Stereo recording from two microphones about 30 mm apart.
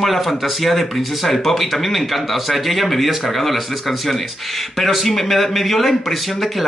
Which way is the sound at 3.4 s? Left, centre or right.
Centre.